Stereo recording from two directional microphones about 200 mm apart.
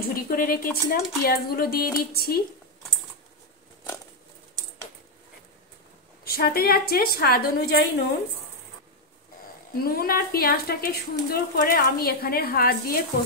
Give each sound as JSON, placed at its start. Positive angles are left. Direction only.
{"t": 0.0, "sound": "a woman's voice", "side_deg": 45}
{"t": 6.2, "sound": "a woman's voice", "side_deg": 50}
{"t": 9.7, "sound": "a woman's voice", "side_deg": 50}